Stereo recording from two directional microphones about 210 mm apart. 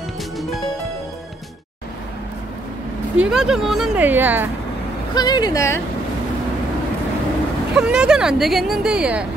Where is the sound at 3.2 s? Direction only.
Centre (ahead or behind).